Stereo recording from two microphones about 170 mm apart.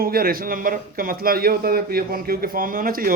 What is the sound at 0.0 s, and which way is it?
A man's voice, 60° right (ahead or behind).